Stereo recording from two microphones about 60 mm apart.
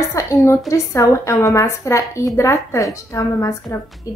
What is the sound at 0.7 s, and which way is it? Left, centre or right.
A woman's voice, left.